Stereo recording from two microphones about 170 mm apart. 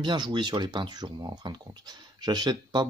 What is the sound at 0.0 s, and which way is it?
Speech, 25° right (ahead or behind).